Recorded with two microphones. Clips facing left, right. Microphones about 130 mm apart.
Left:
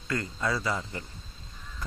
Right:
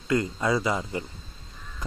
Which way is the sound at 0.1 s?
20° right (ahead or behind).